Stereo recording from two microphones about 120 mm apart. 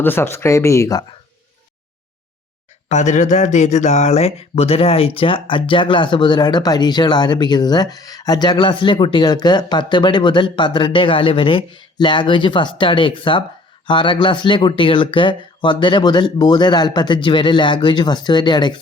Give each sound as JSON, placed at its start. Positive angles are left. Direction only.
{"t": 0.0, "sound": "speech", "side_deg": 20}
{"t": 2.9, "sound": "speech", "side_deg": 85}